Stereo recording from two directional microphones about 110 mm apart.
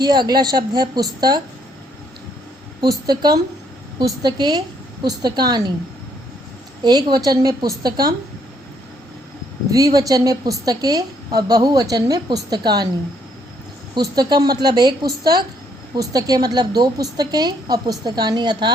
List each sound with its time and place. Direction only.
0.0 s a woman's voice: 40° right (ahead or behind)
3.1 s a woman's voice: 40° right (ahead or behind)
6.8 s a woman's voice: 40° right (ahead or behind)
9.6 s a woman's voice: 35° right (ahead or behind)
13.9 s a woman's voice: 40° right (ahead or behind)